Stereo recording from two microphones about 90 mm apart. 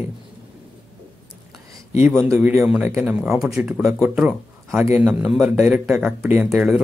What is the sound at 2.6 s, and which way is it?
A man's voice, 10° right (ahead or behind).